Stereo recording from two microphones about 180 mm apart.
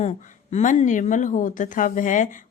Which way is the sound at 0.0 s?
40° left (ahead or behind).